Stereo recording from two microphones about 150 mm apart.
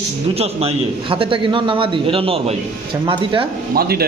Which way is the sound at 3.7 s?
90° right.